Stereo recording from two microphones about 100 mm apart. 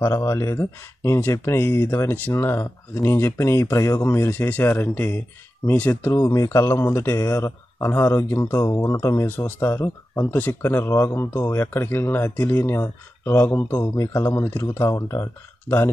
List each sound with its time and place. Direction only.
0.0 s speech: 30° left (ahead or behind)
13.8 s speech: 35° left (ahead or behind)